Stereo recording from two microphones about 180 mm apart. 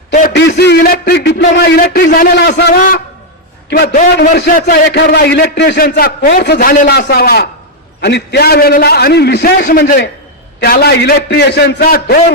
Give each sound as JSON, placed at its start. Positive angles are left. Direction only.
{"t": 0.3, "sound": "a man's voice", "side_deg": 70}